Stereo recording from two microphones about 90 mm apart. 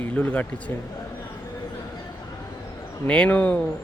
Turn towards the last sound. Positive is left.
turn(degrees=20)  # may be behind; listen again after turning